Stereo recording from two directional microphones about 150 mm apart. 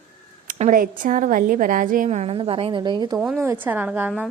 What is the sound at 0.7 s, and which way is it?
A woman's voice, 65° right (ahead or behind).